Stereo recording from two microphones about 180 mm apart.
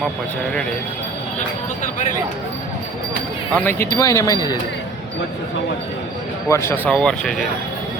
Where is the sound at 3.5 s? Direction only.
10° left (ahead or behind).